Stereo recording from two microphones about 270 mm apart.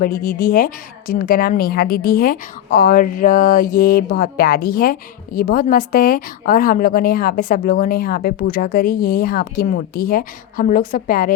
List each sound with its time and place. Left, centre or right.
0.0 s a woman's voice: left